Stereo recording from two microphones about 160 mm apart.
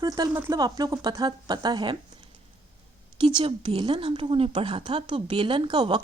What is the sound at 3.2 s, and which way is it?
A woman's voice, 30° right (ahead or behind).